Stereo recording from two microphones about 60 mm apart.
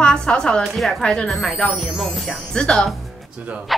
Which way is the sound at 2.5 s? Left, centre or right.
Centre.